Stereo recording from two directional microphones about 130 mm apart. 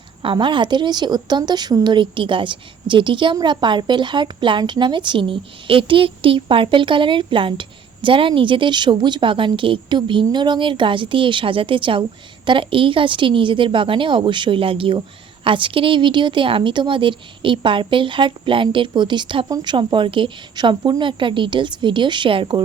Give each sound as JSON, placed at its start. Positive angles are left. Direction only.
{"t": 0.2, "sound": "a woman's voice", "side_deg": -40}